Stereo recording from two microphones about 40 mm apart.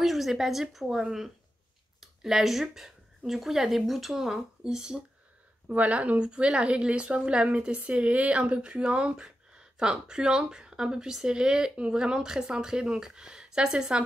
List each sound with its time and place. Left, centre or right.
0.0 s speech: centre
4.2 s speech: centre
5.7 s speech: right
6.2 s a woman's voice: right
9.1 s a woman's voice: centre